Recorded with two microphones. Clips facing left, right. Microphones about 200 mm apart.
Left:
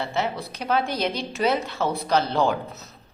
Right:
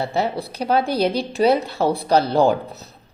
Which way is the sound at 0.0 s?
35° right (ahead or behind).